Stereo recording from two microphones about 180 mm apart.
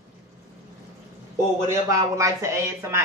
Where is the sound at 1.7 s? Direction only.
15° right (ahead or behind).